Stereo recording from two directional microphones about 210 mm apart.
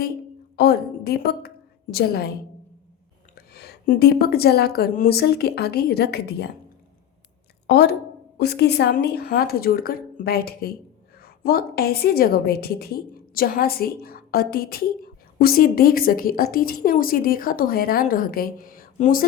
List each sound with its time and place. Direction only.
0.5 s a woman's voice: 50° left (ahead or behind)
3.3 s a woman's voice: 45° left (ahead or behind)
7.7 s a woman's voice: 50° left (ahead or behind)